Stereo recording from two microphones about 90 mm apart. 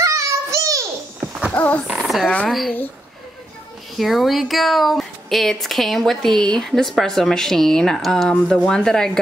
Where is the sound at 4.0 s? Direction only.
Centre (ahead or behind).